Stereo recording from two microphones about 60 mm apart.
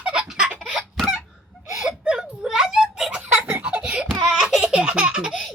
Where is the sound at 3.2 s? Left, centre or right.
Right.